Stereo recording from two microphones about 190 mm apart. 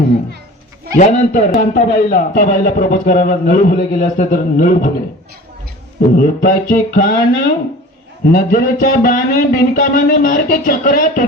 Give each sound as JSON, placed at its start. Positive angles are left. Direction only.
{"t": 0.9, "sound": "a man's voice", "side_deg": 45}
{"t": 6.1, "sound": "a man's voice", "side_deg": 50}